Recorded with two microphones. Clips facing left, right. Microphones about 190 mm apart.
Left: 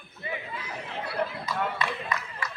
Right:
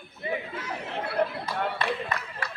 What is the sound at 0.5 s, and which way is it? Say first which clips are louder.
Chatter: right 3 dB; 50° right (ahead or behind).